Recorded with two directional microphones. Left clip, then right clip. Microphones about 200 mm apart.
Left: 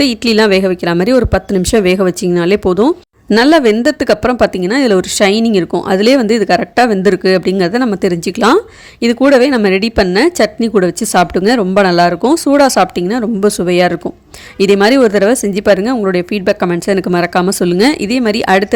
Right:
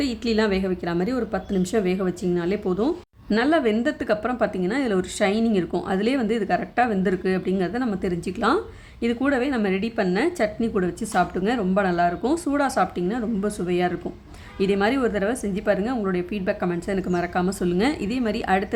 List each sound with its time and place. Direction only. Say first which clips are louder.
0.0 s speech: left 13 dB; 45° left (ahead or behind)